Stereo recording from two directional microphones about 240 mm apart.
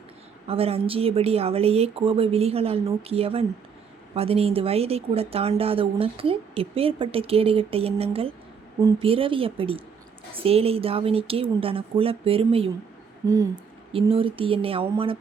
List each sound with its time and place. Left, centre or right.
0.4 s speech: right